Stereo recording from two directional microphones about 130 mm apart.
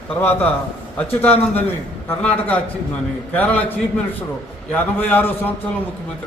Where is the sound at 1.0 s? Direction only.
15° left (ahead or behind).